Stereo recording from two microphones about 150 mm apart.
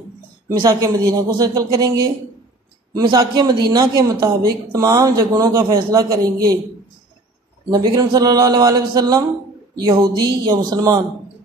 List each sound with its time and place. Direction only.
0.5 s speech: 20° right (ahead or behind)
7.7 s speech: 25° right (ahead or behind)